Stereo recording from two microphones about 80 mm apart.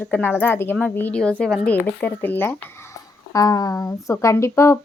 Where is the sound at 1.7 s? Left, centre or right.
Left.